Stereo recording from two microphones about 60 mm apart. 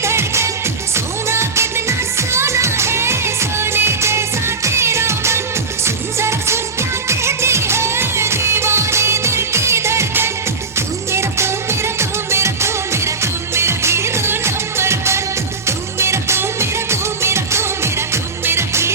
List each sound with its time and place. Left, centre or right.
0.0 s music: right